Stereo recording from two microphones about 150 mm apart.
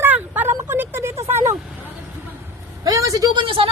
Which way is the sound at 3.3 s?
35° right (ahead or behind).